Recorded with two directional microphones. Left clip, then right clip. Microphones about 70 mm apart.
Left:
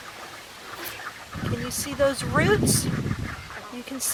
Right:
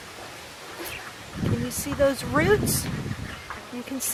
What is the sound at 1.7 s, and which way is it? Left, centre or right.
Speech, centre.